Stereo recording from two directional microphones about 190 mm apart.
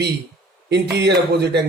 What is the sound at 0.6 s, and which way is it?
Speech, 60° right (ahead or behind).